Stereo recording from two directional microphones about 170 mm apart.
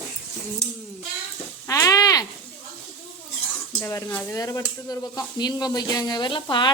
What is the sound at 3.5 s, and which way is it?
Speech, 15° left (ahead or behind).